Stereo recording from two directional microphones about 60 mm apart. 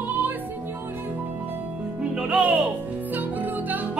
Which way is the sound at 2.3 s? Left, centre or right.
Right.